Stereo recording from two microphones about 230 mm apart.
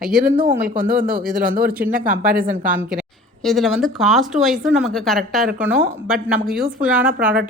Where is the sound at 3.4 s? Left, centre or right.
Centre.